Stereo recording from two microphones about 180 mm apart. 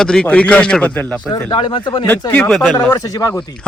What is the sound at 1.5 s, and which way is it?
Speech, 25° left (ahead or behind).